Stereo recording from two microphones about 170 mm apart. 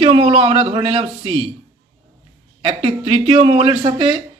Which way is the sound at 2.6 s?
35° right (ahead or behind).